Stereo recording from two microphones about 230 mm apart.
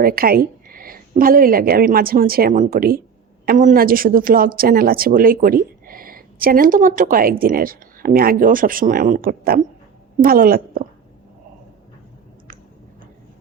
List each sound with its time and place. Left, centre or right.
0.0 s a woman's voice: right